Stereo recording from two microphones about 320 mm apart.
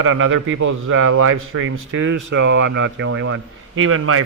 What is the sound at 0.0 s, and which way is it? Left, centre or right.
Speech, right.